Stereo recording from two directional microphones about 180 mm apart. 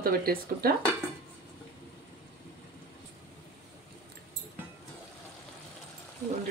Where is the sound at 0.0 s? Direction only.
55° right (ahead or behind).